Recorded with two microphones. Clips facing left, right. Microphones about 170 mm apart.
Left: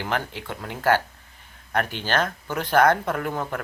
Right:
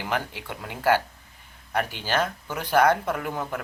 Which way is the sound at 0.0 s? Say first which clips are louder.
Left 1 dB; 10° right (ahead or behind).